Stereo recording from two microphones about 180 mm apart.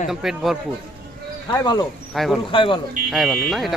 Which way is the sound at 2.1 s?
Centre (ahead or behind).